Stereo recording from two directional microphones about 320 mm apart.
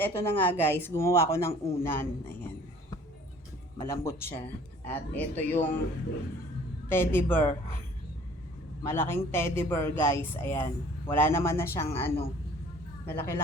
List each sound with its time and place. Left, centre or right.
0.0 s a man's voice: centre
3.8 s a man's voice: centre
6.8 s a man's voice: centre
8.8 s a man's voice: centre